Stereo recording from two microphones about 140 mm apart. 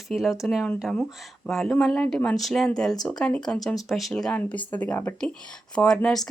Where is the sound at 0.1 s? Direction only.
Centre (ahead or behind).